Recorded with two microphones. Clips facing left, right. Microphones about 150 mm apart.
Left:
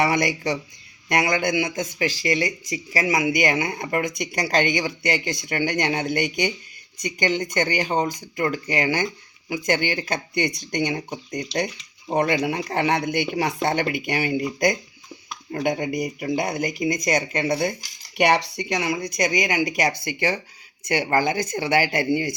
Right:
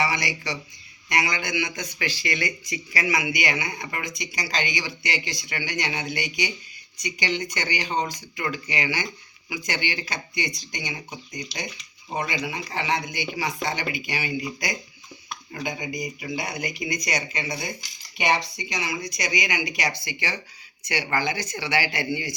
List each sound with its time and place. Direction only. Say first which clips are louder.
0.0 s speech: left 6 dB; 50° left (ahead or behind)
15.5 s speech: left 8 dB; 60° left (ahead or behind)